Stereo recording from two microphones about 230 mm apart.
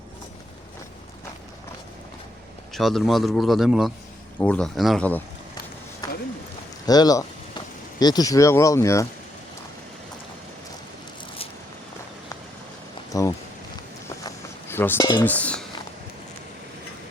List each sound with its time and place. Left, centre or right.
2.7 s a man's voice: centre
6.8 s speech: centre
13.1 s a sound: centre